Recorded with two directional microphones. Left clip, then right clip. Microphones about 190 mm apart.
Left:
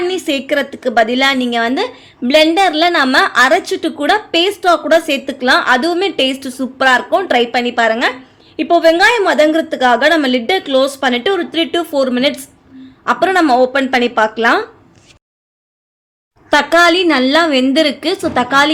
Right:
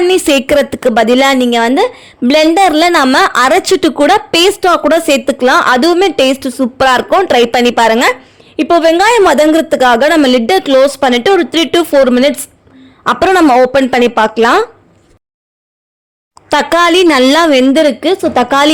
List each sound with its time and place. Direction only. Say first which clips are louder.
0.0 s a woman's voice: right 8 dB; 50° right (ahead or behind)
8.5 s a woman's voice: right 2 dB; 45° right (ahead or behind)
16.5 s a woman's voice: right 1 dB; 50° right (ahead or behind)